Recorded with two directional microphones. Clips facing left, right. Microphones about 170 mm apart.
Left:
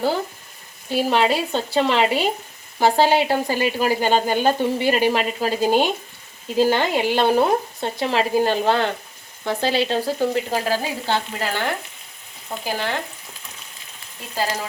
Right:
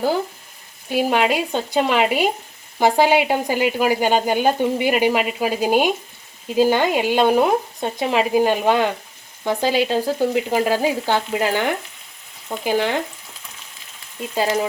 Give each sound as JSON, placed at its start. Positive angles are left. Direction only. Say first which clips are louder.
{"t": 0.9, "sound": "speech", "louder": "right 1 dB", "side_deg": -15}
{"t": 14.3, "sound": "speech", "louder": "right 5 dB", "side_deg": -20}